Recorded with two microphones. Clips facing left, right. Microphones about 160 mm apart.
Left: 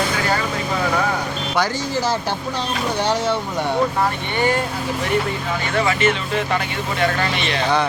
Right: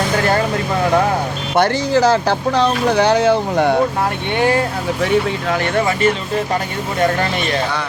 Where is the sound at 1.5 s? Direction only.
65° right (ahead or behind).